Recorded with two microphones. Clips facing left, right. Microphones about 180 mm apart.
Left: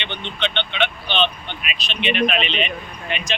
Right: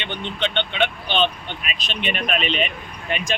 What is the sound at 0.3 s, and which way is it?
Speech, 45° right (ahead or behind).